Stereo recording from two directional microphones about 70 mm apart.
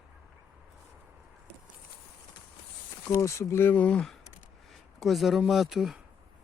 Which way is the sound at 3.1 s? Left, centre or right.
Left.